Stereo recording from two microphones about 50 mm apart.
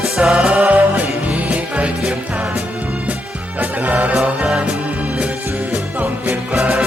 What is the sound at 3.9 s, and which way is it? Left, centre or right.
Music, right.